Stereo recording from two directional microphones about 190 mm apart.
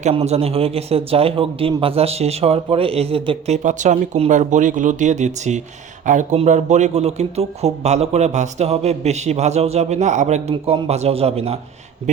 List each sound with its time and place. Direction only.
0.0 s speech: 35° right (ahead or behind)